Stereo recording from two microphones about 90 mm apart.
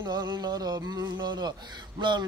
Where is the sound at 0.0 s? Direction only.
55° right (ahead or behind).